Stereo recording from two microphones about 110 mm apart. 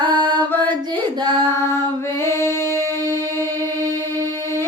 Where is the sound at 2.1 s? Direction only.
25° left (ahead or behind).